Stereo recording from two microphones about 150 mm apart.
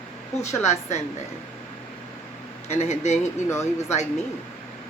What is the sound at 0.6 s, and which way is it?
Speech, 50° left (ahead or behind).